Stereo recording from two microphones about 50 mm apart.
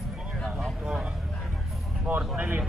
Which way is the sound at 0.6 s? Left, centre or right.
Centre.